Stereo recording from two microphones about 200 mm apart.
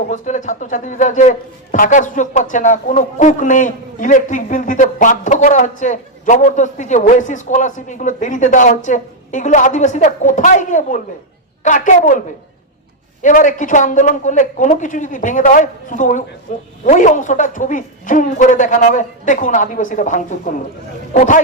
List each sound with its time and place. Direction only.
0.1 s a man's voice: 40° left (ahead or behind)
13.2 s a man's voice: 40° left (ahead or behind)